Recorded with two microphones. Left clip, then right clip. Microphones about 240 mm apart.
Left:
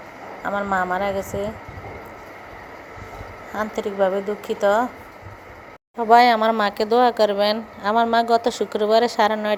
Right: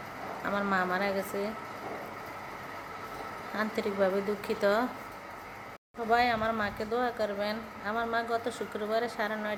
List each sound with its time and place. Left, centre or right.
0.4 s speech: centre
3.5 s speech: centre
6.1 s a woman's voice: left